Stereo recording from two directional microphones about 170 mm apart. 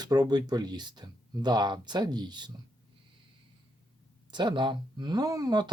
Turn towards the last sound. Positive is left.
turn(degrees=-25)  # may be behind; listen again after turning